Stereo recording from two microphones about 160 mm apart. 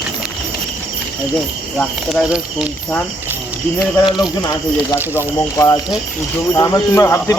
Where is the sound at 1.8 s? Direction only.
Centre (ahead or behind).